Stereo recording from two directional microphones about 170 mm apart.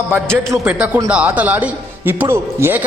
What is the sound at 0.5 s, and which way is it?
Speech, 10° right (ahead or behind).